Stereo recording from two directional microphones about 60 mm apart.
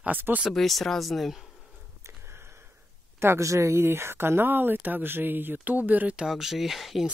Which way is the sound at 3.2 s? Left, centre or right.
Right.